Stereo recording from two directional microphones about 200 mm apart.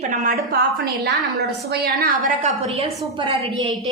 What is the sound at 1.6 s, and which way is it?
Speech, 50° right (ahead or behind).